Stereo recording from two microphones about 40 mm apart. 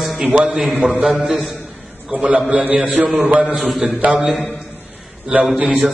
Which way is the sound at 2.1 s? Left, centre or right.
Right.